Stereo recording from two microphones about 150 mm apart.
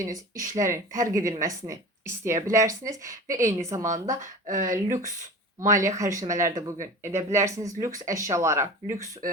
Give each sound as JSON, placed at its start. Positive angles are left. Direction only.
{"t": 0.0, "sound": "speech", "side_deg": -20}
{"t": 3.8, "sound": "speech", "side_deg": -55}
{"t": 5.5, "sound": "speech", "side_deg": -20}